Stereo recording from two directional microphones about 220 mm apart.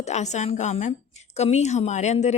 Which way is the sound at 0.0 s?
30° left (ahead or behind).